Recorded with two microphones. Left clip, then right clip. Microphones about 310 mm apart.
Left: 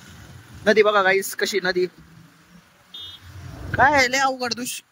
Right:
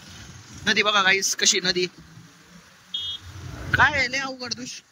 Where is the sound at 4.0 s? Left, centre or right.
Left.